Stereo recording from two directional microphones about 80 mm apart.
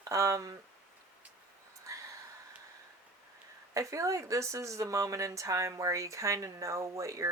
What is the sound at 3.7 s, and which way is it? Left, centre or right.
Speech, right.